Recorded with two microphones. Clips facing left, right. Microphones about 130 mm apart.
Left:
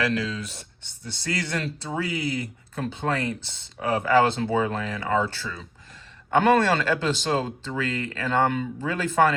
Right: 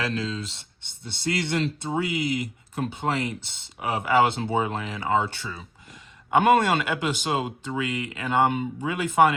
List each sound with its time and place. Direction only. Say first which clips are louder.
0.0 s speech: left 2 dB; 25° right (ahead or behind)